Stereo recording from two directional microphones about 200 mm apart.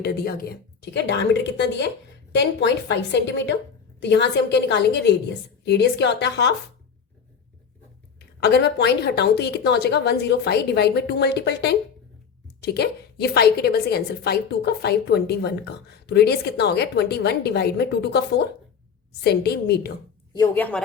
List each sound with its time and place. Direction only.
0.0 s a woman's voice: 50° left (ahead or behind)
8.4 s a woman's voice: 55° left (ahead or behind)
20.3 s speech: 15° left (ahead or behind)